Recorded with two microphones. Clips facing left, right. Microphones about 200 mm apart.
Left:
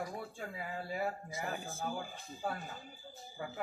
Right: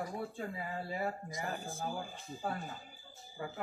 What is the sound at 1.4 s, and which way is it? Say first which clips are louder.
Speech: even; centre (ahead or behind).